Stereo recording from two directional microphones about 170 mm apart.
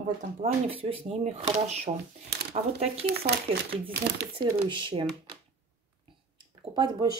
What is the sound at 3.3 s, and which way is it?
Speech, 75° right (ahead or behind).